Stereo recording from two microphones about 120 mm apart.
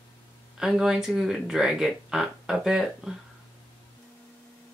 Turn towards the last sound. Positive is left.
turn(degrees=-5)  # may be behind; listen again after turning